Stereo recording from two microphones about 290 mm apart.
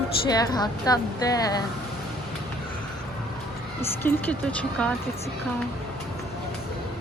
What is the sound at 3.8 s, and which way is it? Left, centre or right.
Speech, centre.